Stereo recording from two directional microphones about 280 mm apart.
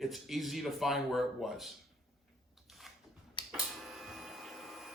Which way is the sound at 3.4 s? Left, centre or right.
Centre.